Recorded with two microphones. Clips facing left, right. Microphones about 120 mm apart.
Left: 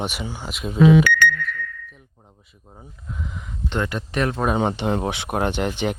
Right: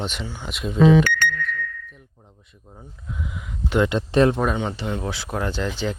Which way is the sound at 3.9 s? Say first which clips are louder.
Right 6 dB; 25° right (ahead or behind).